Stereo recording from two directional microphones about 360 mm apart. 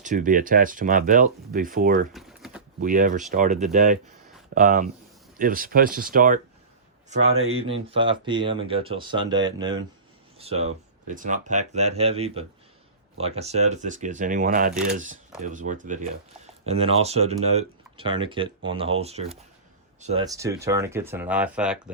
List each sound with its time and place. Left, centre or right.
0.0 s speech: right
2.1 s typing: centre
2.8 s speech: right; by 21.8 s centre